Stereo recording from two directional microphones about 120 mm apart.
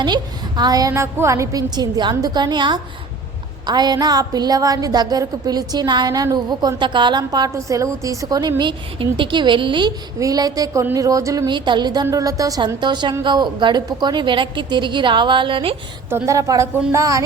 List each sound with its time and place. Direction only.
0.0 s a woman's voice: 35° right (ahead or behind)
10.2 s a woman's voice: 30° right (ahead or behind)
11.5 s a woman's voice: 40° right (ahead or behind)
16.0 s a woman's voice: 20° right (ahead or behind)